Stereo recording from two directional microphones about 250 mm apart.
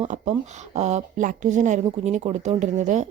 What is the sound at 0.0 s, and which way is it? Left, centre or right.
A woman's voice, right.